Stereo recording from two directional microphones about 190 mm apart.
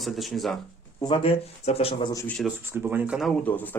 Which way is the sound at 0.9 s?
25° left (ahead or behind).